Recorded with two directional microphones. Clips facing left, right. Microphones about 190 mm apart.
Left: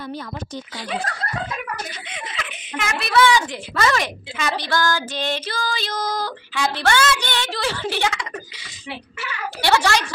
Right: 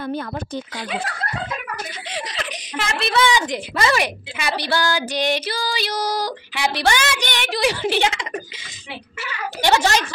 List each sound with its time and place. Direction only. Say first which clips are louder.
2.0 s a child's voice: right 4 dB; 35° right (ahead or behind)
9.6 s a child's voice: right 1 dB; 15° right (ahead or behind)